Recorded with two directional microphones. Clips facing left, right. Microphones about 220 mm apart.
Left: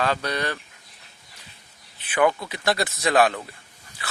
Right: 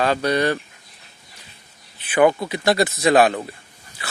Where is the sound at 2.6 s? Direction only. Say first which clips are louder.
Right 6 dB; 20° right (ahead or behind).